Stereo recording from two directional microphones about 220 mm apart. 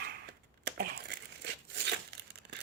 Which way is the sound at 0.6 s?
45° right (ahead or behind).